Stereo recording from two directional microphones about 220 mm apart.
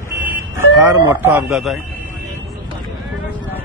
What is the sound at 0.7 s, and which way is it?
A man's voice, 5° right (ahead or behind).